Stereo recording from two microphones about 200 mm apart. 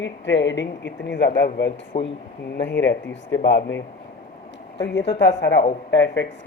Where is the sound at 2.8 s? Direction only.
65° left (ahead or behind).